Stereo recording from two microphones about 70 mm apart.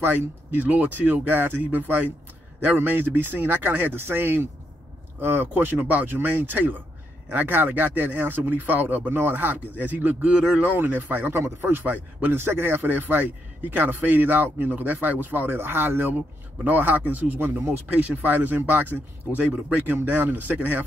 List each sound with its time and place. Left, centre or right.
0.0 s a man's voice: right